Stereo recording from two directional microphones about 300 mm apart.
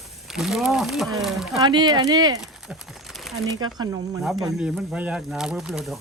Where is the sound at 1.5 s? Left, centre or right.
Centre.